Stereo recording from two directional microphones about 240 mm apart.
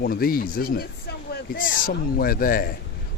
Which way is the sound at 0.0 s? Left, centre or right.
Left.